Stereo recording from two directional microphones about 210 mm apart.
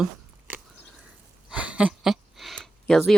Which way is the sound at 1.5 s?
5° right (ahead or behind).